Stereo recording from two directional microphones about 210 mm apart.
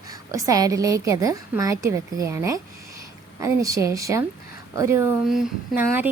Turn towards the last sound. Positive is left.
turn(degrees=-10)  # may be behind; listen again after turning